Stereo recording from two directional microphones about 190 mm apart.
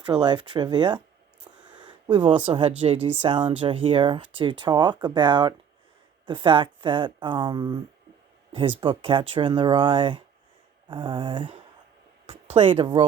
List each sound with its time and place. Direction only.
0.1 s speech: 25° right (ahead or behind)
1.5 s a sound: 25° right (ahead or behind)
2.5 s speech: 30° right (ahead or behind)
8.8 s speech: 25° right (ahead or behind)